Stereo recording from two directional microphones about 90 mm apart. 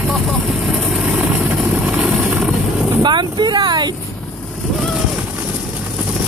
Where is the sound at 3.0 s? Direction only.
55° right (ahead or behind).